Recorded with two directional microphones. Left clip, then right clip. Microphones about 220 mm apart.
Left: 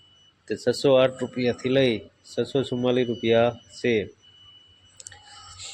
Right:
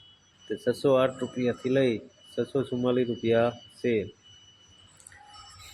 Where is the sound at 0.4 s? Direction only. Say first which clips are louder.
Left 4 dB; 10° left (ahead or behind).